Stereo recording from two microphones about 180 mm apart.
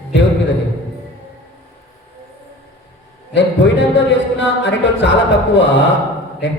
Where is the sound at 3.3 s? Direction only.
75° left (ahead or behind).